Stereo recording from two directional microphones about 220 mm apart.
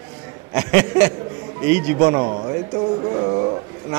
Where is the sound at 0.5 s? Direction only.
10° right (ahead or behind).